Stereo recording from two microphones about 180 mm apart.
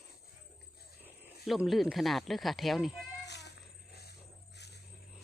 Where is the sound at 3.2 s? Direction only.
70° left (ahead or behind).